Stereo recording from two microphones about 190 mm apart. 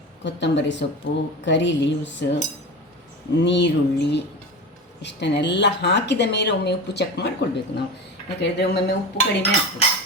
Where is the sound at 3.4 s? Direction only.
65° left (ahead or behind).